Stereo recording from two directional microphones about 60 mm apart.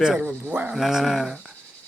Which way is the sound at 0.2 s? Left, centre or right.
Centre.